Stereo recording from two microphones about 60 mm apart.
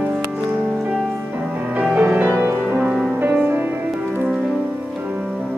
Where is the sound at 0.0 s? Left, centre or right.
Right.